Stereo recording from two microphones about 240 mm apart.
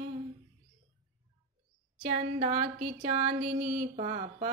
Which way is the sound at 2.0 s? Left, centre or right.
Right.